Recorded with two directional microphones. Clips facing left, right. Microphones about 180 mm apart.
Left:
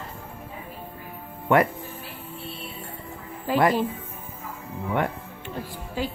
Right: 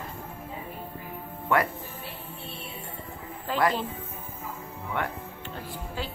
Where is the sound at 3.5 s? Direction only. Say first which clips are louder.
Left 5 dB; 10° left (ahead or behind).